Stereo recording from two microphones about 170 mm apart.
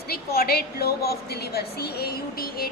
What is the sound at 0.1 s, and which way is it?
A woman's voice, 65° left (ahead or behind).